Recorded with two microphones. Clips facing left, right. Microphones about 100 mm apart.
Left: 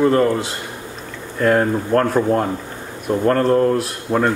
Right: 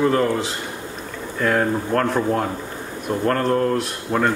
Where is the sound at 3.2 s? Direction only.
25° left (ahead or behind).